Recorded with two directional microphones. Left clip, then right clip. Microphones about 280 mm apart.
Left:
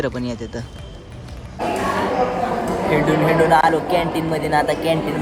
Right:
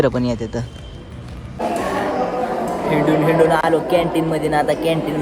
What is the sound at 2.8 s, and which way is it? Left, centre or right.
Speech, centre.